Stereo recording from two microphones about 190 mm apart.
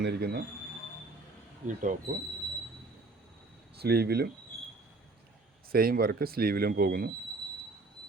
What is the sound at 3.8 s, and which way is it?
Speech, 55° right (ahead or behind).